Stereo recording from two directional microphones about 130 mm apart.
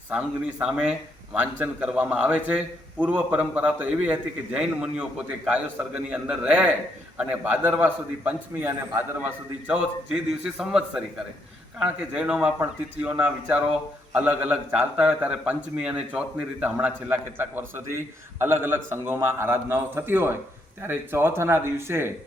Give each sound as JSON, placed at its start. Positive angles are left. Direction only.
{"t": 0.6, "sound": "a man's voice", "side_deg": -5}